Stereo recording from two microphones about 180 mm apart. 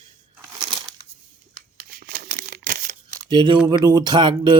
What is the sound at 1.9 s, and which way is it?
Tearing, 50° right (ahead or behind).